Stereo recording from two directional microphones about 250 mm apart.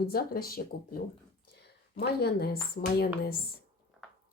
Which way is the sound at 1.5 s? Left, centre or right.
Left.